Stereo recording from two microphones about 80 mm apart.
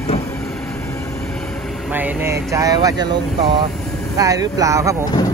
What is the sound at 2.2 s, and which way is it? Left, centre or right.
Speech, right.